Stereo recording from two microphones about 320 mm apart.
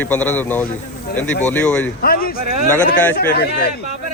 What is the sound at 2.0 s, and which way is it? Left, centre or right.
Speech, left.